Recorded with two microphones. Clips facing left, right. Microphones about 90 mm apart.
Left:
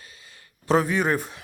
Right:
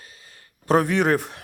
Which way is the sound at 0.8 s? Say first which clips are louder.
Right 4 dB; 70° right (ahead or behind).